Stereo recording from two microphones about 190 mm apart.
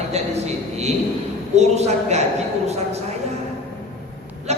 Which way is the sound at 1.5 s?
35° right (ahead or behind).